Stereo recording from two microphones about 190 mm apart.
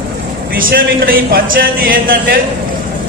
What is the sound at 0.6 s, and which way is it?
Speech, 50° right (ahead or behind).